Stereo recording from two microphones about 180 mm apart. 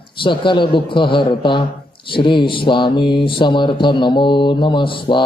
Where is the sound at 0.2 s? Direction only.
25° left (ahead or behind).